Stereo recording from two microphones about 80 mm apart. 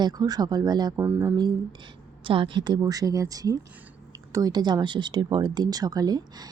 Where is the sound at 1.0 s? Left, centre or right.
Right.